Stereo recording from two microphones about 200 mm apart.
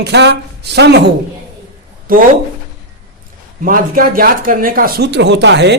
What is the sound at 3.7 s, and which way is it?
Speech, 45° right (ahead or behind).